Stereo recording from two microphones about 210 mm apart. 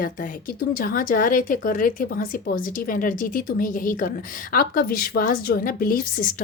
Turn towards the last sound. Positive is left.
turn(degrees=40)  # may be behind; listen again after turning